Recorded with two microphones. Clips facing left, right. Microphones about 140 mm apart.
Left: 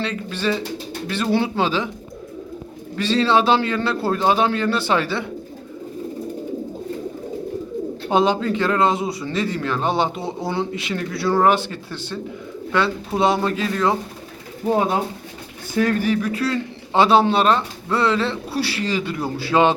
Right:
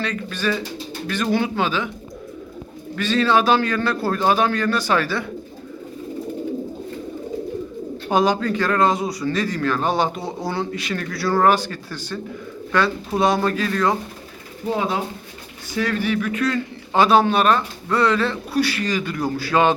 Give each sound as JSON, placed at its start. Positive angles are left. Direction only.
{"t": 0.0, "sound": "a man's voice", "side_deg": 25}
{"t": 2.9, "sound": "a man's voice", "side_deg": 30}
{"t": 8.1, "sound": "a man's voice", "side_deg": 25}
{"t": 14.7, "sound": "a man's voice", "side_deg": 45}